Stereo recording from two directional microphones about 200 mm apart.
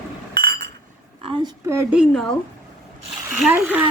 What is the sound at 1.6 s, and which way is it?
Speech, 15° right (ahead or behind).